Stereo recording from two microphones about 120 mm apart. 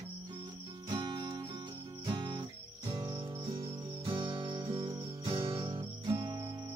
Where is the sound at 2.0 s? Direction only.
40° right (ahead or behind).